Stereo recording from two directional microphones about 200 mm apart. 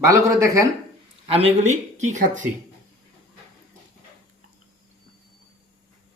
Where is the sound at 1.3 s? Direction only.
30° right (ahead or behind).